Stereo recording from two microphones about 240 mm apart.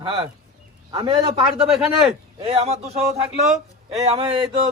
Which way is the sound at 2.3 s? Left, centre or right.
Right.